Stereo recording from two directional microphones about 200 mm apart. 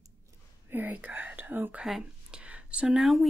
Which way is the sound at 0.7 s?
10° right (ahead or behind).